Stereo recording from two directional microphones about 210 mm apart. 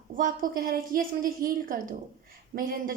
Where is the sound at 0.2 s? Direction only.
40° right (ahead or behind).